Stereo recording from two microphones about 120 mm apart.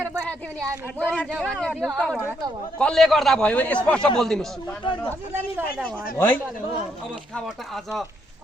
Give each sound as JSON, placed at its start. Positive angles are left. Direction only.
{"t": 0.0, "sound": "a sound", "side_deg": -20}
{"t": 0.9, "sound": "a man's voice", "side_deg": 10}
{"t": 4.8, "sound": "a man's voice", "side_deg": 45}
{"t": 6.1, "sound": "a man's voice", "side_deg": 15}